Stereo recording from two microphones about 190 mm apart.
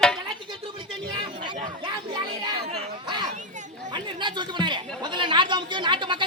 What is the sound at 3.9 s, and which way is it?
Speech, 25° right (ahead or behind).